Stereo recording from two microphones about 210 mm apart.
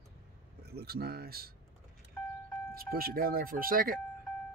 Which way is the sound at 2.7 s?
45° right (ahead or behind).